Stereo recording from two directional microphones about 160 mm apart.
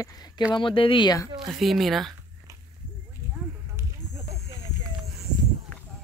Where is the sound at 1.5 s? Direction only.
Centre (ahead or behind).